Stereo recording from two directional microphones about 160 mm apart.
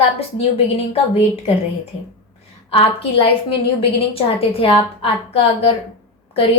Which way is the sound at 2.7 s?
35° left (ahead or behind).